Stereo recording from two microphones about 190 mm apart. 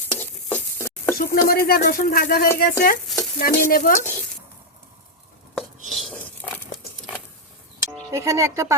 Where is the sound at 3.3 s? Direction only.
50° left (ahead or behind).